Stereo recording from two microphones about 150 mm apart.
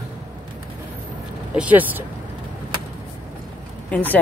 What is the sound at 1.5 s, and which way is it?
Speech, 10° right (ahead or behind).